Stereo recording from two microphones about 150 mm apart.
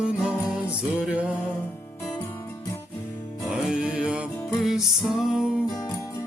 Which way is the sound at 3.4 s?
5° right (ahead or behind).